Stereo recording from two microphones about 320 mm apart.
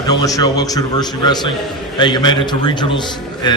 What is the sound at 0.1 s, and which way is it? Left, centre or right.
A man's voice, centre.